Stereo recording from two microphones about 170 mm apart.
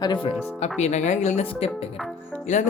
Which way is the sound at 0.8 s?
45° left (ahead or behind).